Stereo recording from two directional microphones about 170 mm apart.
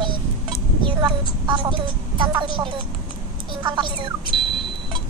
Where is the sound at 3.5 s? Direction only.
30° right (ahead or behind).